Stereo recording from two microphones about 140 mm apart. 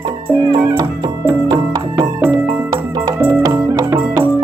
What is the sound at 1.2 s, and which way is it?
Music, 20° right (ahead or behind).